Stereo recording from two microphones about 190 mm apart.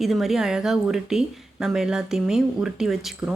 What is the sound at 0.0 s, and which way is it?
Speech, centre (ahead or behind).